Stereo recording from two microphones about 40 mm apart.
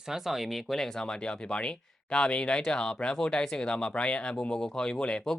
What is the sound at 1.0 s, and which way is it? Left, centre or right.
Speech, left.